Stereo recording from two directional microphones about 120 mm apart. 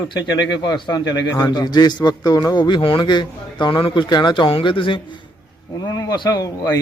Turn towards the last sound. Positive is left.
turn(degrees=30)  # may be behind; listen again after turning